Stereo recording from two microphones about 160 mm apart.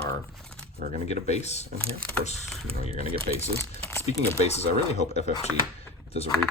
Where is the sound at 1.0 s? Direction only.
45° left (ahead or behind).